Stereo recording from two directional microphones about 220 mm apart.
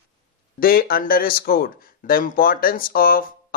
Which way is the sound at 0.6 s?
40° left (ahead or behind).